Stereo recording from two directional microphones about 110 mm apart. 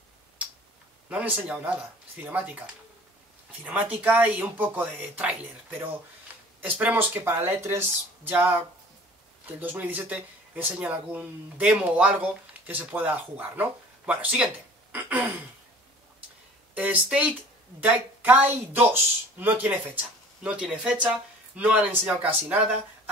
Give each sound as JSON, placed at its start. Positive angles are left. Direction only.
{"t": 1.0, "sound": "speech", "side_deg": -10}
{"t": 16.7, "sound": "speech", "side_deg": -10}